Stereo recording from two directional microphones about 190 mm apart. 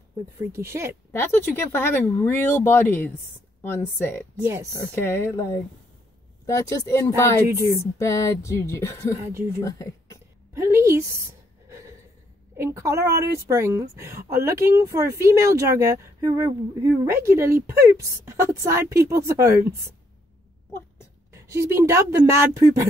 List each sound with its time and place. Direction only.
0.5 s a woman's voice: 15° right (ahead or behind)
1.1 s speech: 10° left (ahead or behind)
7.3 s a woman's voice: 15° right (ahead or behind)
7.8 s speech: 15° left (ahead or behind)
10.5 s a woman's voice: 15° right (ahead or behind)
12.5 s a woman's voice: 15° right (ahead or behind)
21.3 s a woman's voice: 15° right (ahead or behind)